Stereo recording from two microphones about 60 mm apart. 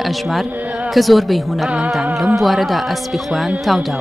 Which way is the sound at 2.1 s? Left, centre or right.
Centre.